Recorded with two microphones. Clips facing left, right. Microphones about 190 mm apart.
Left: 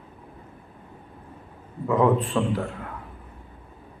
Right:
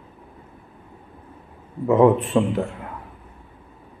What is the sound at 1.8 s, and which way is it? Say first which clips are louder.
Speech: right 5 dB; 25° right (ahead or behind).